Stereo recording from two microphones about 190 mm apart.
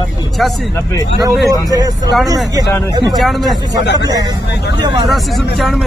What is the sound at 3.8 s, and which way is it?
Speech, 70° left (ahead or behind).